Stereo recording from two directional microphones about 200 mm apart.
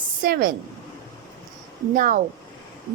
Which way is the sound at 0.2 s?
45° right (ahead or behind).